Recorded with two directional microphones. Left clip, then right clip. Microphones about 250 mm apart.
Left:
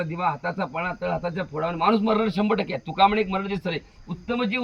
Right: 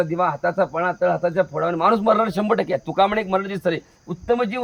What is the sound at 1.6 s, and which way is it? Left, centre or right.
A man's voice, centre.